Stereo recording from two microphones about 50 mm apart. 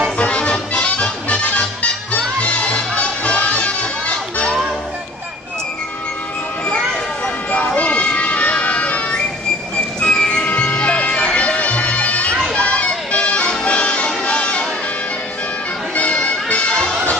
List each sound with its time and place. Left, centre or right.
0.2 s music: left
7.8 s music: left
16.0 s music: left